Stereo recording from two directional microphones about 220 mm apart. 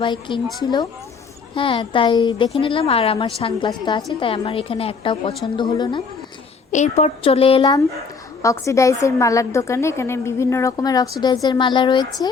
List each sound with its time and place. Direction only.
0.0 s a woman's voice: 20° left (ahead or behind)
1.5 s a woman's voice: 25° left (ahead or behind)
6.7 s a woman's voice: 35° left (ahead or behind)